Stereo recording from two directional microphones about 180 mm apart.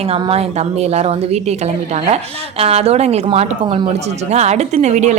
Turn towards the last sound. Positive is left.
turn(degrees=-40)  # may be behind; listen again after turning